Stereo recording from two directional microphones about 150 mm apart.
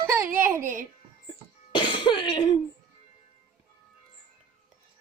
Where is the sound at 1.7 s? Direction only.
30° left (ahead or behind).